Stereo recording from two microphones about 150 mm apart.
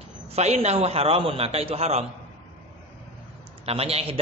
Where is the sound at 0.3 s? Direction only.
45° right (ahead or behind).